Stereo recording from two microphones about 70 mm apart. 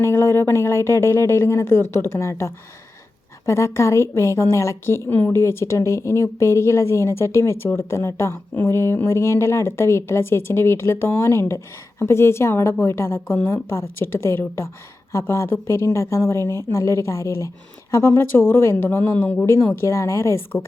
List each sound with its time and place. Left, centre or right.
0.0 s a woman's voice: left